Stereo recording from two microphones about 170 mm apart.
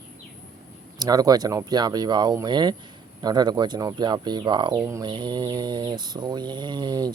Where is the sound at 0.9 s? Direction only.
20° right (ahead or behind).